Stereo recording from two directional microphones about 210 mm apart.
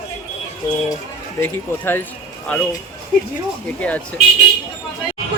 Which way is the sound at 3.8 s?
10° left (ahead or behind).